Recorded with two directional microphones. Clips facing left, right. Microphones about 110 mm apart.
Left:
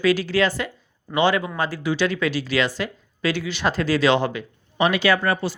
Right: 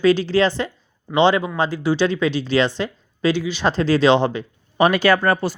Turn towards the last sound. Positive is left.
turn(degrees=-45)  # may be behind; listen again after turning